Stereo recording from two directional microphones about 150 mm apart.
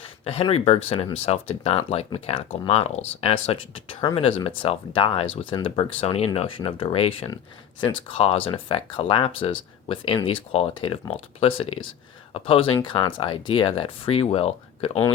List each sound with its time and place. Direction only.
0.3 s speech: 40° left (ahead or behind)